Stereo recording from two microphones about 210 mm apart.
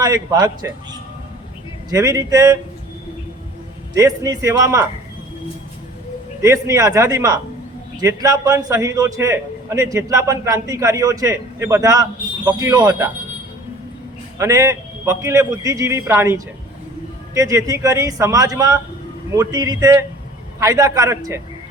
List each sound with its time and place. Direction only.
0.0 s a man's voice: 15° right (ahead or behind)
1.9 s a man's voice: 15° right (ahead or behind)
3.9 s a man's voice: 15° right (ahead or behind)
6.4 s a man's voice: 15° right (ahead or behind)
14.3 s a man's voice: 15° right (ahead or behind)